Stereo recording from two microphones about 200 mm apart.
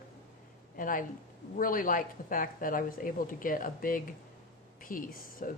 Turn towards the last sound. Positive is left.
turn(degrees=45)  # may be behind; listen again after turning